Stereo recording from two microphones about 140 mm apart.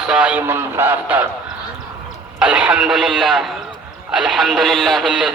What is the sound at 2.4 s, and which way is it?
Speech, 10° right (ahead or behind).